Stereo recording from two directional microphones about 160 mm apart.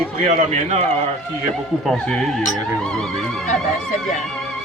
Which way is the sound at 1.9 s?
5° left (ahead or behind).